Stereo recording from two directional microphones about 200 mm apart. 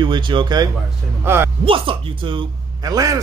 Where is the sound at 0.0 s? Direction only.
25° right (ahead or behind).